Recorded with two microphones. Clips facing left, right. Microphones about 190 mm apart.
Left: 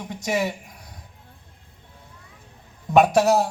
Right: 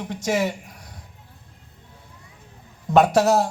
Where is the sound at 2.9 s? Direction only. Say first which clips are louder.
Even; 15° left (ahead or behind).